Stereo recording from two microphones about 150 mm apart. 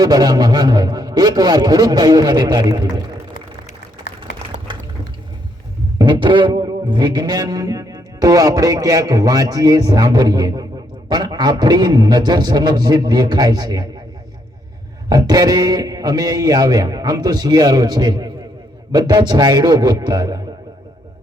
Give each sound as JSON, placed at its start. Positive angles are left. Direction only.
{"t": 0.0, "sound": "a man's voice", "side_deg": -25}
{"t": 6.0, "sound": "a man's voice", "side_deg": -30}
{"t": 15.1, "sound": "a man's voice", "side_deg": -25}